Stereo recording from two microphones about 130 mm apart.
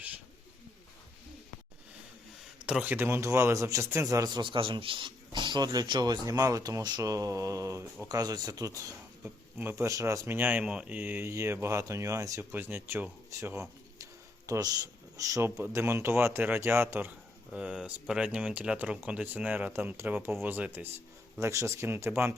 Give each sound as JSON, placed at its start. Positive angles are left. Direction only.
{"t": 2.6, "sound": "a man's voice", "side_deg": -10}